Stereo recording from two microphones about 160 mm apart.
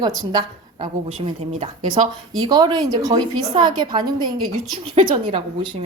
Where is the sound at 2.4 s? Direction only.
25° right (ahead or behind).